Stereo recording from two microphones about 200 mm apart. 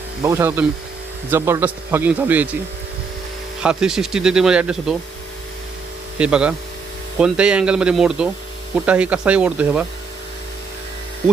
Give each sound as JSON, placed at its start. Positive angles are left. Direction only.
{"t": 0.2, "sound": "speech", "side_deg": -15}
{"t": 3.6, "sound": "speech", "side_deg": -5}
{"t": 6.1, "sound": "speech", "side_deg": -5}